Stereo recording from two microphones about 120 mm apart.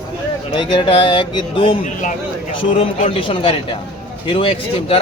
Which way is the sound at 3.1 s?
50° left (ahead or behind).